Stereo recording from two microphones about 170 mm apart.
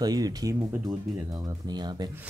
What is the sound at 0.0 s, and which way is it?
Speech, 25° right (ahead or behind).